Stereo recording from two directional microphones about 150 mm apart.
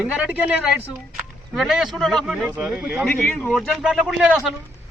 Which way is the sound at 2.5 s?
10° right (ahead or behind).